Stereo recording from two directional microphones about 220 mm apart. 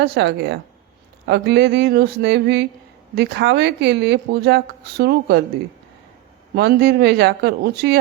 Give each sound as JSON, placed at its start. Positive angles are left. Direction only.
{"t": 0.0, "sound": "speech", "side_deg": -50}
{"t": 6.6, "sound": "speech", "side_deg": -45}